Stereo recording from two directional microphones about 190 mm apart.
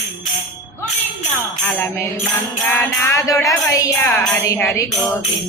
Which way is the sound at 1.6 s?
10° left (ahead or behind).